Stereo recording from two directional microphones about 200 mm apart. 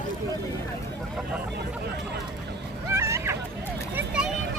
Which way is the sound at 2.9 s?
15° right (ahead or behind).